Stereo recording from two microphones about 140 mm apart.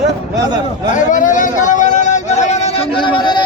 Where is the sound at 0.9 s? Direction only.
65° left (ahead or behind).